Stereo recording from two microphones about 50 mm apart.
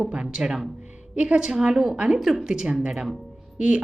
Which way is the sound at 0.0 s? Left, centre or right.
Centre.